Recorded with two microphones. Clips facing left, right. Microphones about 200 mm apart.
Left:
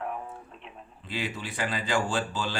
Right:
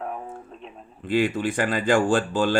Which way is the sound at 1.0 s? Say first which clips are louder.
Right 12 dB; 50° right (ahead or behind).